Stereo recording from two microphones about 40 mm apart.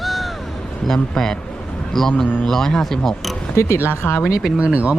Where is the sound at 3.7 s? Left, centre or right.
Left.